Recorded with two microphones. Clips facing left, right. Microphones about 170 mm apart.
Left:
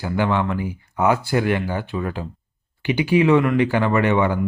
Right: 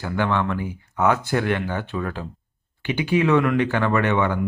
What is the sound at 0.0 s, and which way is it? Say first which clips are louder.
Speech: left 2 dB; 10° left (ahead or behind).